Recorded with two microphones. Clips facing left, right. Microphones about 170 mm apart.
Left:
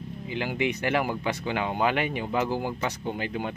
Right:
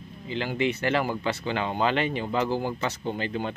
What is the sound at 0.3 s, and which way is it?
Speech, 15° left (ahead or behind).